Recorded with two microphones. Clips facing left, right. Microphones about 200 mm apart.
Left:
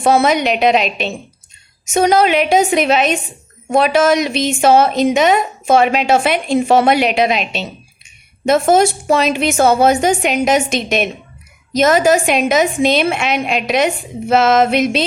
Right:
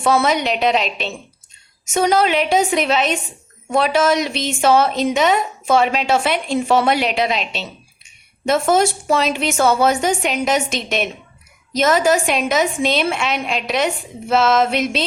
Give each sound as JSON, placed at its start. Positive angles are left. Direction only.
{"t": 0.1, "sound": "a woman's voice", "side_deg": 15}
{"t": 8.7, "sound": "a woman's voice", "side_deg": 15}